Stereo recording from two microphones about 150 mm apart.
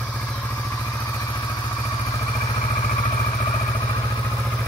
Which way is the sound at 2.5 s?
35° left (ahead or behind).